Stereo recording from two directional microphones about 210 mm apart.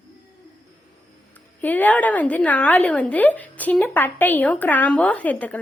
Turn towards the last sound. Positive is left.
turn(degrees=5)  # may be behind; listen again after turning